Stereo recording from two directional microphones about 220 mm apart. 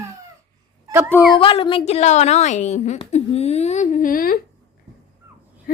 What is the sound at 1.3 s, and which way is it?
Speech, 25° left (ahead or behind).